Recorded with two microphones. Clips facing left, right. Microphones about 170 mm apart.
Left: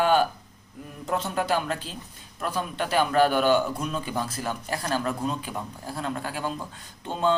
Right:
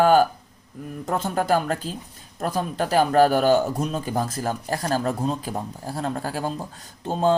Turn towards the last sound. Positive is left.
turn(degrees=-40)  # may be behind; listen again after turning